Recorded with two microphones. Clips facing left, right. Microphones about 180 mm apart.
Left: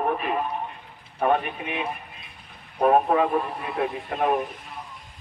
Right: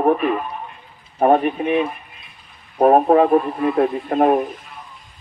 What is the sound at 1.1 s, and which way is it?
Speech, 45° right (ahead or behind).